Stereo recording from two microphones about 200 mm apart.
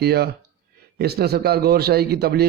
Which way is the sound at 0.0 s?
55° right (ahead or behind).